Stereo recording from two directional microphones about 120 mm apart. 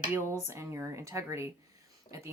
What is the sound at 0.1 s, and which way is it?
Speech, 20° right (ahead or behind).